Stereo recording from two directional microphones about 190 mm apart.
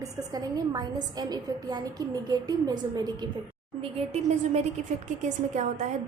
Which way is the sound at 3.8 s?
35° right (ahead or behind).